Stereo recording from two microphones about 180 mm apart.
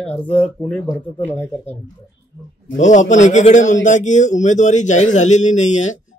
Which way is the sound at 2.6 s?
40° left (ahead or behind).